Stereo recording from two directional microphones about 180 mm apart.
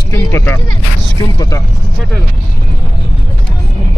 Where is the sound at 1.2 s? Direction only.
20° left (ahead or behind).